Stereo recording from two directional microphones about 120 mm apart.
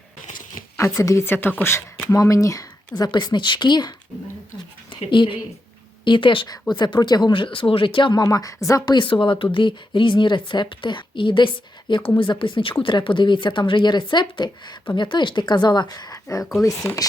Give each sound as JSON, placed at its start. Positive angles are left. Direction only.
{"t": 0.8, "sound": "speech", "side_deg": 25}
{"t": 5.1, "sound": "a woman's voice", "side_deg": 45}
{"t": 8.2, "sound": "a woman's voice", "side_deg": 30}